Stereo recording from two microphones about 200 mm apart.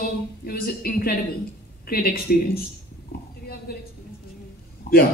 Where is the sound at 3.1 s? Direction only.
50° left (ahead or behind).